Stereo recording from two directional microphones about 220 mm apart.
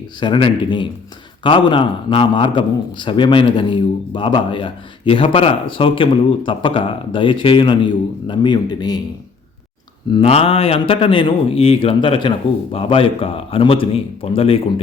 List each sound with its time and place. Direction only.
0.2 s a man's voice: 20° left (ahead or behind)
10.1 s a man's voice: 25° left (ahead or behind)